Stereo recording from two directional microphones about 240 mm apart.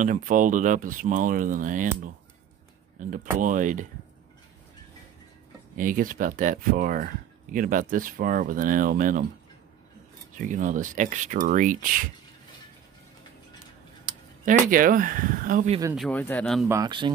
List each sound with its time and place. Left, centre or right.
0.0 s speech: right
3.3 s speech: right
5.8 s speech: right
10.3 s speech: right
14.1 s a sound: centre
14.4 s speech: right
16.0 s speech: centre
16.6 s speech: centre